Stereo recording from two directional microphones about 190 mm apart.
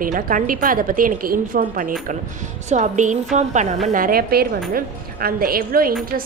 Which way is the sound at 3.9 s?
50° right (ahead or behind).